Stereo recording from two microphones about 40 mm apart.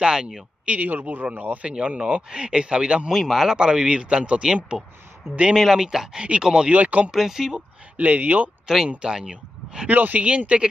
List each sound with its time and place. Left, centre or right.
0.0 s speech: centre
0.7 s speech: right
1.6 s speech: right
3.1 s speech: centre
3.5 s speech: right
4.7 s speech: centre
6.7 s speech: right
7.1 s speech: centre
8.0 s speech: right
8.7 s speech: centre
9.8 s speech: right